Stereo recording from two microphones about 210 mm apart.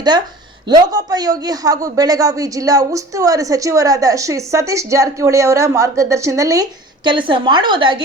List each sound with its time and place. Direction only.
0.7 s a man's voice: 20° right (ahead or behind)